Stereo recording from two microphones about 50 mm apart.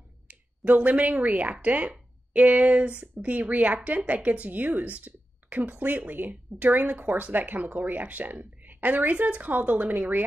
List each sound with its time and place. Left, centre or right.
0.3 s speech: right